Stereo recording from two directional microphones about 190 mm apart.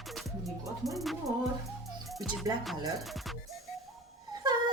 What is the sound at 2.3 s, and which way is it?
Speech, centre (ahead or behind).